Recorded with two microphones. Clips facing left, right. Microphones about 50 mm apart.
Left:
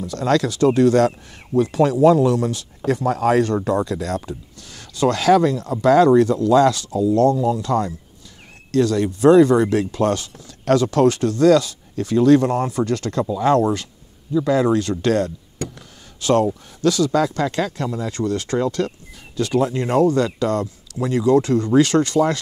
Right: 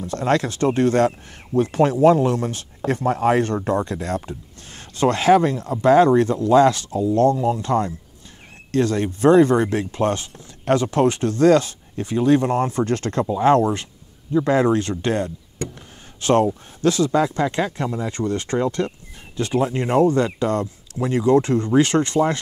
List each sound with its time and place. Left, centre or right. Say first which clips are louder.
0.0 s speech: left 1 dB; right